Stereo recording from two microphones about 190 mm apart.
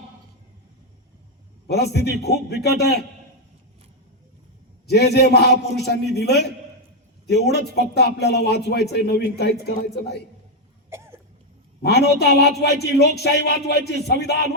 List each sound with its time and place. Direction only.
1.6 s a man's voice: 60° left (ahead or behind)
4.9 s a man's voice: 60° left (ahead or behind)
10.8 s cough: 15° right (ahead or behind)
11.8 s a man's voice: 60° left (ahead or behind)